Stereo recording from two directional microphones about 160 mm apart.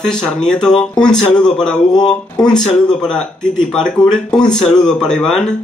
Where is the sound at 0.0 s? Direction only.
5° left (ahead or behind).